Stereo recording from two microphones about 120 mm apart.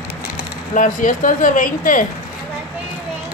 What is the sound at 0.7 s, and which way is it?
Speech, 90° left.